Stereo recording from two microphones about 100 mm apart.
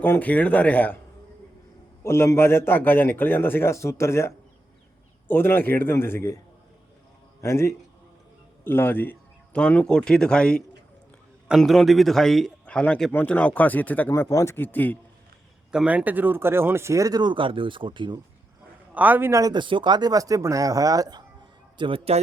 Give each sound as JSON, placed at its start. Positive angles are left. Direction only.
{"t": 0.0, "sound": "speech", "side_deg": 20}
{"t": 2.0, "sound": "a man's voice", "side_deg": 25}
{"t": 7.4, "sound": "a man's voice", "side_deg": 30}
{"t": 8.6, "sound": "a sound", "side_deg": 20}
{"t": 9.6, "sound": "speech", "side_deg": 10}
{"t": 11.4, "sound": "a man's voice", "side_deg": -5}
{"t": 14.1, "sound": "a man's voice", "side_deg": 30}
{"t": 15.7, "sound": "speech", "side_deg": -10}
{"t": 18.9, "sound": "a man's voice", "side_deg": -15}
{"t": 19.3, "sound": "speech", "side_deg": -35}
{"t": 19.5, "sound": "speech", "side_deg": -55}
{"t": 21.8, "sound": "a man's voice", "side_deg": -60}